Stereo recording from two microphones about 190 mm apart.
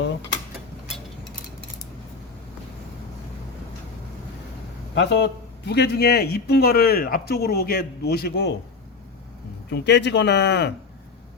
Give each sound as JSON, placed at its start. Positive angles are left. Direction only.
{"t": 4.9, "sound": "a man's voice", "side_deg": 65}
{"t": 9.6, "sound": "a man's voice", "side_deg": 65}